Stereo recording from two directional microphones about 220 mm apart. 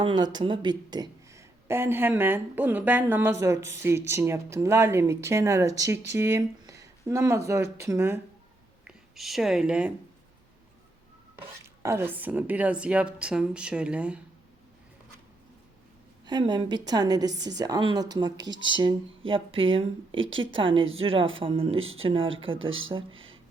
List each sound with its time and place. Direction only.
0.0 s speech: 20° right (ahead or behind); by 9.9 s 5° right (ahead or behind)
11.6 s a woman's voice: 10° right (ahead or behind)
16.2 s a woman's voice: 20° right (ahead or behind)
20.1 s a woman's voice: 60° right (ahead or behind)
20.6 s a woman's voice: 25° right (ahead or behind)